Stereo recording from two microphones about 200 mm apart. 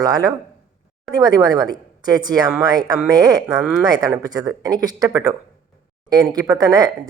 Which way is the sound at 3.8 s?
20° right (ahead or behind).